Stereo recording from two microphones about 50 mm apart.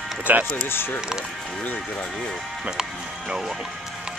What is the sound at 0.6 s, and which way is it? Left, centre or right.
Speech, left.